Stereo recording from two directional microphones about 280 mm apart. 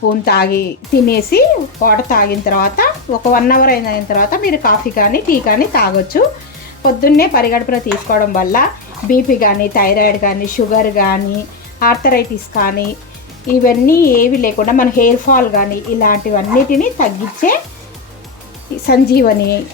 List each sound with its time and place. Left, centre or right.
0.3 s speech: left
18.9 s speech: left